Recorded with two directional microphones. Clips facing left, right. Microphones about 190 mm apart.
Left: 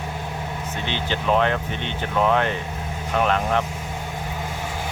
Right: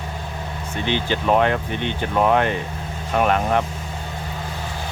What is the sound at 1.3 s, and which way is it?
Speech, 50° right (ahead or behind).